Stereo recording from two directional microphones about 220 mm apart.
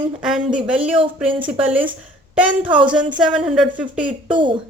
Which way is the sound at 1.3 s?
20° right (ahead or behind).